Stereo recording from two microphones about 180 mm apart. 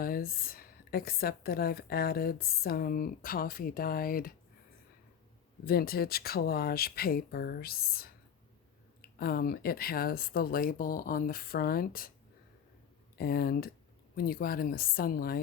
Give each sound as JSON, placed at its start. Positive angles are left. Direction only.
{"t": 0.0, "sound": "speech", "side_deg": 55}
{"t": 5.6, "sound": "speech", "side_deg": 60}
{"t": 13.1, "sound": "speech", "side_deg": 60}